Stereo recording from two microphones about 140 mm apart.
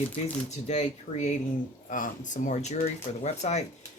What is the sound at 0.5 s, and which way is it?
Speech, 55° left (ahead or behind).